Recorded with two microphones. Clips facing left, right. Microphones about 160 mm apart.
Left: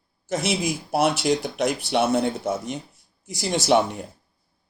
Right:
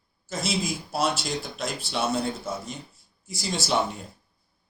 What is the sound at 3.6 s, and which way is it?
Speech, 60° left (ahead or behind).